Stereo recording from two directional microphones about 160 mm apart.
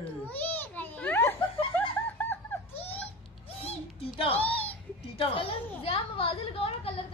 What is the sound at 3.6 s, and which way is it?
Music, 35° left (ahead or behind).